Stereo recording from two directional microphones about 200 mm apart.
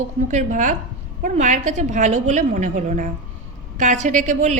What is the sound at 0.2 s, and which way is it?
A woman's voice, 35° right (ahead or behind).